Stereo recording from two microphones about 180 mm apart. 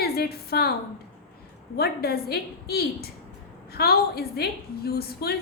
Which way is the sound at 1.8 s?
60° left (ahead or behind).